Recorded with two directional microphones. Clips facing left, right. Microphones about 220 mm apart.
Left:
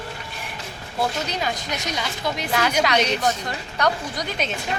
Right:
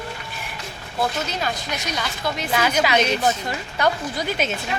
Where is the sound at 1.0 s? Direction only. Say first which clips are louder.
Even; 15° left (ahead or behind).